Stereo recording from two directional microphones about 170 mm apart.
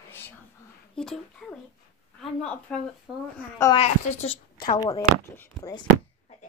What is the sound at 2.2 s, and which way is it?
Speech, 5° left (ahead or behind).